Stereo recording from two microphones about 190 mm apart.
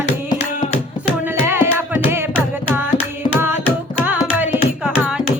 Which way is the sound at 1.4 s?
10° right (ahead or behind).